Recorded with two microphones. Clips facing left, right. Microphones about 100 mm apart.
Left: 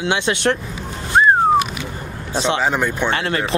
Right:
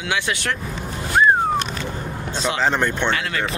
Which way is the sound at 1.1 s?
25° left (ahead or behind).